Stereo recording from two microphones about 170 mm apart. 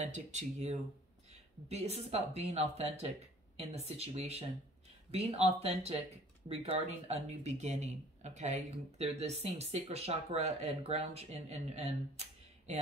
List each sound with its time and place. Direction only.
0.0 s speech: 45° right (ahead or behind)